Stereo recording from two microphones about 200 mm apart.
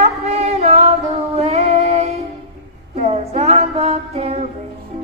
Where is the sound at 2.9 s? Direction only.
30° right (ahead or behind).